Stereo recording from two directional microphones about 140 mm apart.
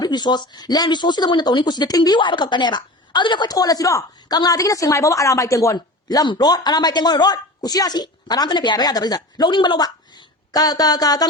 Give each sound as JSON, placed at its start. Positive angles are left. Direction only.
{"t": 0.0, "sound": "speech", "side_deg": 30}